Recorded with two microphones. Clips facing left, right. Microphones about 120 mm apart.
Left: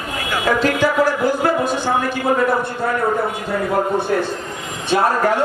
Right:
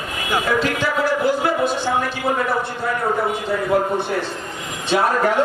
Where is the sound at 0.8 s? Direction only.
45° left (ahead or behind).